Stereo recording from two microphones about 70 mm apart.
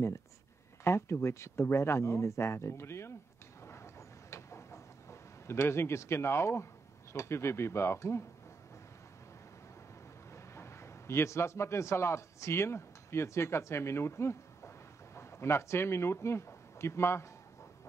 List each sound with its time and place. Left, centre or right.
0.8 s speech: left
3.6 s a sound: left
10.3 s a man's voice: left